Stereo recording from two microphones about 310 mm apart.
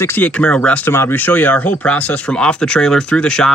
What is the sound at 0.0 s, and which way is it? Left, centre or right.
Speech, centre.